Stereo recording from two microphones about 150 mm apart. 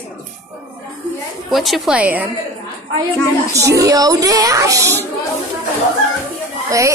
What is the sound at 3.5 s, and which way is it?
Speech, 20° right (ahead or behind).